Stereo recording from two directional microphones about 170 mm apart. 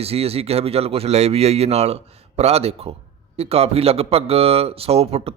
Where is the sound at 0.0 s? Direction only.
35° right (ahead or behind).